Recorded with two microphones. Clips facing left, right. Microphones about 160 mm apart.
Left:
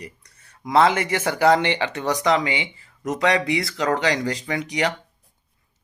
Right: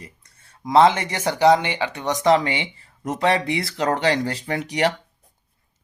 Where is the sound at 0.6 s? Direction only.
25° right (ahead or behind).